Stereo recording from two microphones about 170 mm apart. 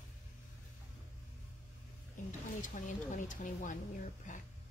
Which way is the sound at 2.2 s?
50° left (ahead or behind).